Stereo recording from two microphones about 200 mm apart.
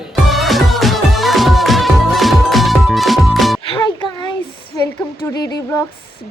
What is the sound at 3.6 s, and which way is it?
Music, 25° left (ahead or behind).